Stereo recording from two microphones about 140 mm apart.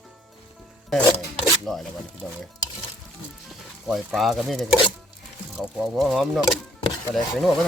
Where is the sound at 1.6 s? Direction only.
Centre (ahead or behind).